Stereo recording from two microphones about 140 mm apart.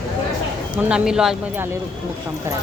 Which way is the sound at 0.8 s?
10° right (ahead or behind).